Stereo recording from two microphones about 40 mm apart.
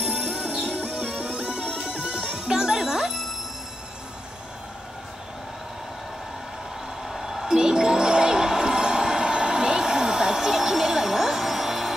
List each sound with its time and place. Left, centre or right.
0.0 s music: right
7.1 s a sound: centre
7.5 s music: centre